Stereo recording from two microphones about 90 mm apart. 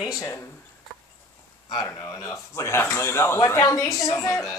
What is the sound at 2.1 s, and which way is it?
Speech, 40° left (ahead or behind).